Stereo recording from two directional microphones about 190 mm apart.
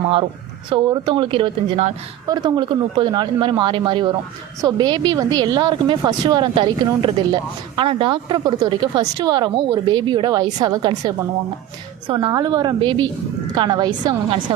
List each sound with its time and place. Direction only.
0.7 s a woman's voice: 25° right (ahead or behind)